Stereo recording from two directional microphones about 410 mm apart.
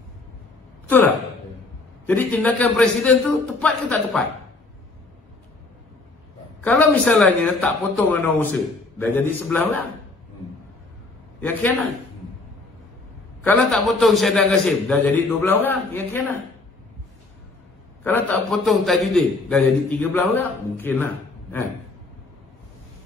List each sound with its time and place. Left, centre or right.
0.8 s a man's voice: centre
6.6 s a man's voice: centre
11.4 s a man's voice: centre
13.4 s a man's voice: centre
18.0 s a man's voice: centre